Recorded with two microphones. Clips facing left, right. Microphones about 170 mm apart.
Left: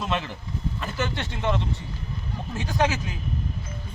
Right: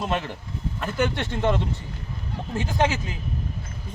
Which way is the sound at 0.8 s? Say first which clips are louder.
Right 6 dB; 55° right (ahead or behind).